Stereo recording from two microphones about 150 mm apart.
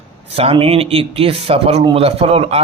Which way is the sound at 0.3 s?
40° right (ahead or behind).